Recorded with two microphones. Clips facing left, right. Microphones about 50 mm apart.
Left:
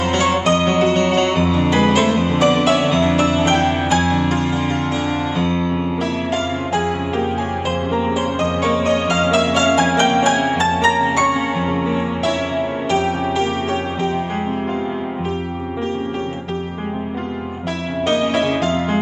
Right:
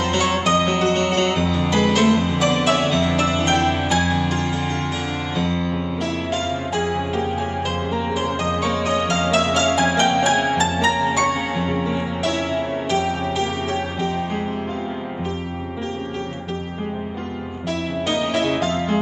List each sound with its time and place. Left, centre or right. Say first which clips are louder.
0.1 s music: left 3 dB; centre
5.4 s music: left 4 dB; centre
8.6 s music: left 4 dB; centre
18.0 s music: left 4 dB; centre